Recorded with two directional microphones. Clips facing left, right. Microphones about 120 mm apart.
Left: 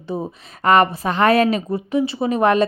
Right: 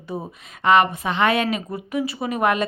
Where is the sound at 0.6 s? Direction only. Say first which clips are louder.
Left 2 dB; 40° left (ahead or behind).